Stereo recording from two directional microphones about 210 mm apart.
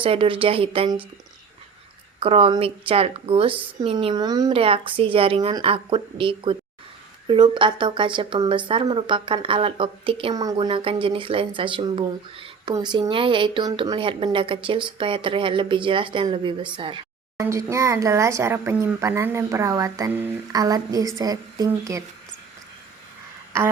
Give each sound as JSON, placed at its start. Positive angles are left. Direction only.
{"t": 0.0, "sound": "speech", "side_deg": -25}
{"t": 2.2, "sound": "speech", "side_deg": -25}